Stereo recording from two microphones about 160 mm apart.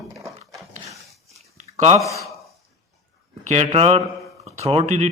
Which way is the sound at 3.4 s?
45° right (ahead or behind).